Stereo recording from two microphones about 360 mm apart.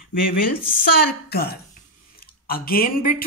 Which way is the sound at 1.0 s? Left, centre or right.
Left.